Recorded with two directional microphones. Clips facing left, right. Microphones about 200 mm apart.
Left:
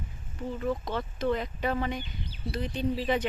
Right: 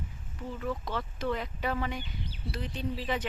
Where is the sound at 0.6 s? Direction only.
20° left (ahead or behind).